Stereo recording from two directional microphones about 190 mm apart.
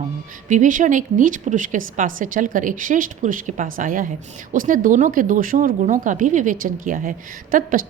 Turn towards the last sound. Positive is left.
turn(degrees=-45)  # may be behind; listen again after turning